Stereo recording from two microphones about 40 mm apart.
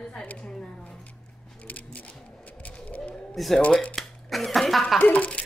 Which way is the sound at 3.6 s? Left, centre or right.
Left.